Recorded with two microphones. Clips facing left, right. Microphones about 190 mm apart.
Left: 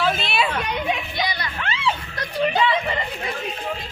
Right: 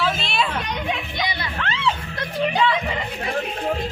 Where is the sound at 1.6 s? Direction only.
10° left (ahead or behind).